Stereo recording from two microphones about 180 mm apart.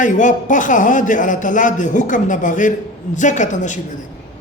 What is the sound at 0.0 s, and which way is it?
A man's voice, 45° left (ahead or behind).